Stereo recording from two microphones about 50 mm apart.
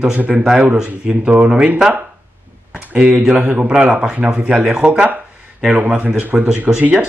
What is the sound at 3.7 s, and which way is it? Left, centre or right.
Speech, right.